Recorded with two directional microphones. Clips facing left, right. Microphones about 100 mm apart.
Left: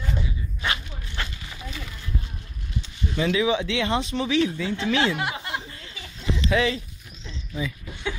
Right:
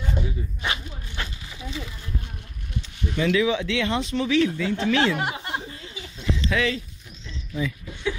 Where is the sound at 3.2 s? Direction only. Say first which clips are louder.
Right 1 dB; 20° left (ahead or behind).